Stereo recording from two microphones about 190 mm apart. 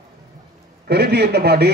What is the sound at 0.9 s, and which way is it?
Speech, 60° right (ahead or behind).